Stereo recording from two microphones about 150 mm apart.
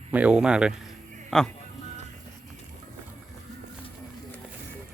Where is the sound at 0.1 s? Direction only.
10° right (ahead or behind).